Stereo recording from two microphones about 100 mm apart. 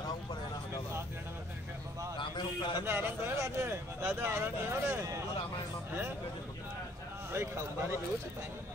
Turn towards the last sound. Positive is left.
turn(degrees=-25)  # may be behind; listen again after turning